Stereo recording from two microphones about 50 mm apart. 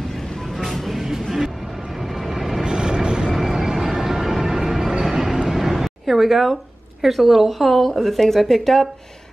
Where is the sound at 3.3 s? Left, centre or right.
Centre.